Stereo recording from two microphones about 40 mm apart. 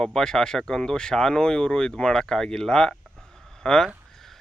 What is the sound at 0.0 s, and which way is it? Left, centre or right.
Speech, centre.